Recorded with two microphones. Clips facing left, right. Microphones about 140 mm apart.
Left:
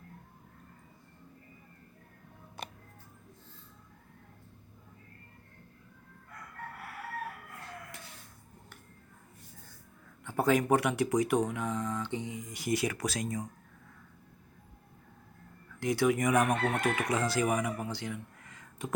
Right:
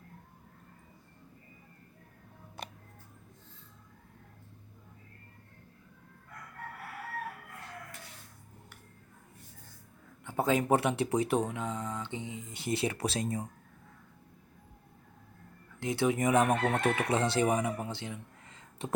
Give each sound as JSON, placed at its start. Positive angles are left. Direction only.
{"t": 10.2, "sound": "speech", "side_deg": -20}
{"t": 15.8, "sound": "speech", "side_deg": -25}